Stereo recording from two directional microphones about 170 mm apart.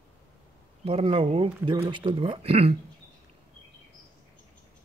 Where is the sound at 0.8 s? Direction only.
35° right (ahead or behind).